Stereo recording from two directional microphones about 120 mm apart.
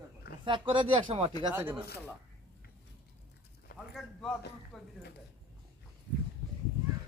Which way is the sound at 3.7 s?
Centre (ahead or behind).